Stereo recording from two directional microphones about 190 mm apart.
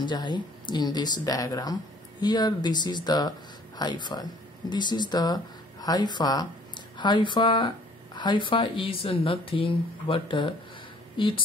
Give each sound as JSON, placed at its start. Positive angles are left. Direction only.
{"t": 0.0, "sound": "speech", "side_deg": 25}